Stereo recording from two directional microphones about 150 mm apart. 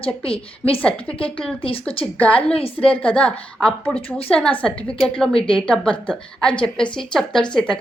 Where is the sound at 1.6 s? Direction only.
40° left (ahead or behind).